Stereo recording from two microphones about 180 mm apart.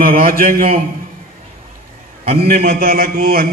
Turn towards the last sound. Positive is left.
turn(degrees=-55)  # may be behind; listen again after turning